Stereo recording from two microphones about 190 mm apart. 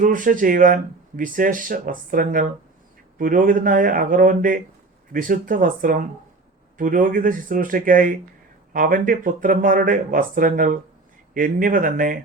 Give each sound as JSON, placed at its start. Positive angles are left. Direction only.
{"t": 0.0, "sound": "speech", "side_deg": -45}